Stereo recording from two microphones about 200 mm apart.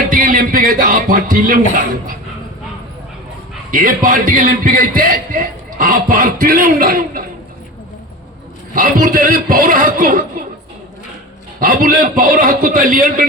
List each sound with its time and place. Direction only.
0.1 s music: 45° right (ahead or behind)
3.7 s a man's voice: 40° right (ahead or behind)
8.7 s a man's voice: 45° right (ahead or behind)
11.6 s a man's voice: 45° right (ahead or behind)